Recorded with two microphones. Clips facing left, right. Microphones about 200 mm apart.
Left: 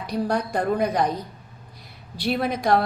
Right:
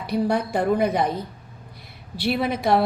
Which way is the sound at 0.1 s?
5° right (ahead or behind).